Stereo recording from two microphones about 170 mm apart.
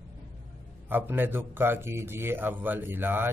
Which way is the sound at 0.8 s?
10° right (ahead or behind).